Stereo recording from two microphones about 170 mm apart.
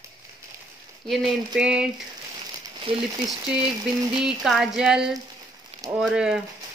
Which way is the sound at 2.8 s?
30° right (ahead or behind).